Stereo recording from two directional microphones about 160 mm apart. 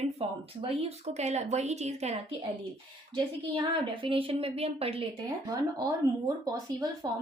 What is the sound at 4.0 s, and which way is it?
Speech, 35° right (ahead or behind).